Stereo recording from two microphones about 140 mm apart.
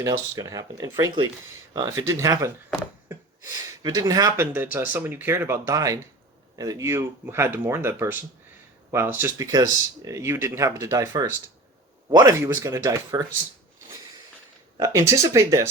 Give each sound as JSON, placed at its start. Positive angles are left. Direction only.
{"t": 0.0, "sound": "speech", "side_deg": -25}
{"t": 3.8, "sound": "speech", "side_deg": -25}
{"t": 12.3, "sound": "speech", "side_deg": -20}
{"t": 14.8, "sound": "speech", "side_deg": -20}